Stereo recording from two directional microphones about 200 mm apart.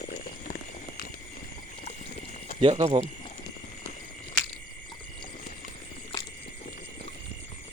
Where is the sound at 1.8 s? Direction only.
30° left (ahead or behind).